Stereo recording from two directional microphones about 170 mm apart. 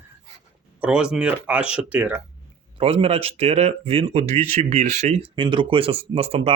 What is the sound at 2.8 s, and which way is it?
Speech, 35° right (ahead or behind).